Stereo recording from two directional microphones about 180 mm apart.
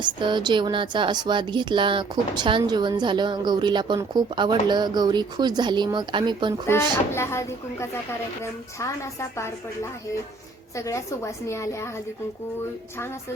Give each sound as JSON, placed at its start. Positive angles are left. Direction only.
{"t": 0.0, "sound": "speech", "side_deg": -25}
{"t": 6.7, "sound": "speech", "side_deg": 15}
{"t": 10.8, "sound": "speech", "side_deg": 15}